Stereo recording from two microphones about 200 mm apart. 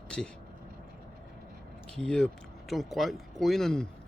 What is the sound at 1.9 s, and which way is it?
Speech, 5° left (ahead or behind).